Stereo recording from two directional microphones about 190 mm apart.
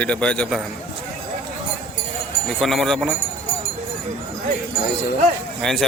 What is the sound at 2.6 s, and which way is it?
Speech, centre (ahead or behind).